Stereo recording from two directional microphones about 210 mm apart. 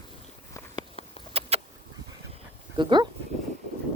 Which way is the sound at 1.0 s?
25° left (ahead or behind).